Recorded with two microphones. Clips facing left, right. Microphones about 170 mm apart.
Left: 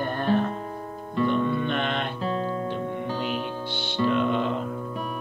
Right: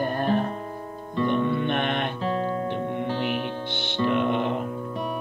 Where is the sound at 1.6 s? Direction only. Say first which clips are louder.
Right 2 dB; 55° right (ahead or behind).